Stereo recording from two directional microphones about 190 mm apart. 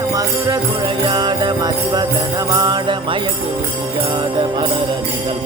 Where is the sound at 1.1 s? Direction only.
25° right (ahead or behind).